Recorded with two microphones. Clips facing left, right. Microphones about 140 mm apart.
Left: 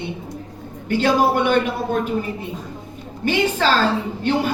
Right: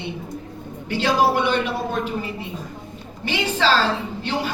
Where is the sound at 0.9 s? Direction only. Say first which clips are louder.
Left 2 dB; 50° left (ahead or behind).